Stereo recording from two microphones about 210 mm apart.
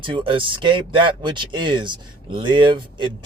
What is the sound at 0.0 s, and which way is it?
Speech, 25° right (ahead or behind).